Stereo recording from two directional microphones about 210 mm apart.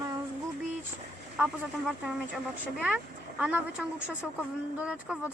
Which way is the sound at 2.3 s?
5° right (ahead or behind).